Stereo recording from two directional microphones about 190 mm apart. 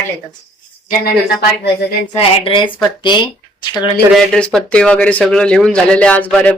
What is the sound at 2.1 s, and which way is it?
A woman's voice, 30° left (ahead or behind).